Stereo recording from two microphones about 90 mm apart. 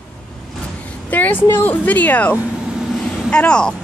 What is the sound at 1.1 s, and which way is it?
A woman's voice, 20° left (ahead or behind).